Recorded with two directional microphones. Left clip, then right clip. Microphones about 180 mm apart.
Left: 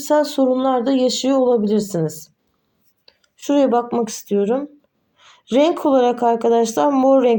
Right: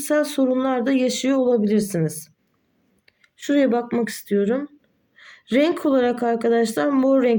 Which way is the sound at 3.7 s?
55° right (ahead or behind).